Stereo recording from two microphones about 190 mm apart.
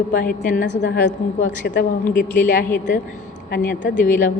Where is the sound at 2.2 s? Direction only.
45° left (ahead or behind).